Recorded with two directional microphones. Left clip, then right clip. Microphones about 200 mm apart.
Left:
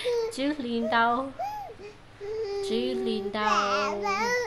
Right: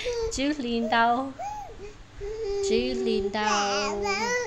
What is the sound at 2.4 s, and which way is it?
Child singing, 20° left (ahead or behind).